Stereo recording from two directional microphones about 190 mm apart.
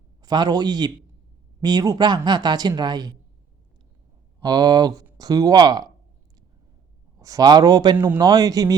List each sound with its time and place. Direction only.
0.2 s a man's voice: 20° right (ahead or behind)
4.4 s speech: 20° right (ahead or behind)
7.2 s speech: 20° right (ahead or behind)